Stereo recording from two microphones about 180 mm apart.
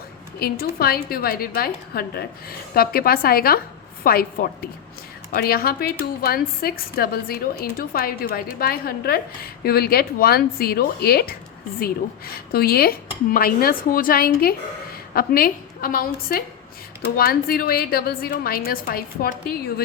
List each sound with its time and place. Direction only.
0.3 s a woman's voice: 60° left (ahead or behind)